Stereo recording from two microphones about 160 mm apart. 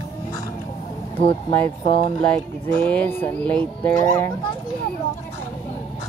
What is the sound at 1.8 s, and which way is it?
Speech, 35° left (ahead or behind).